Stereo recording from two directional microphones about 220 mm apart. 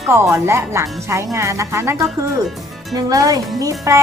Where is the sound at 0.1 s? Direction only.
10° right (ahead or behind).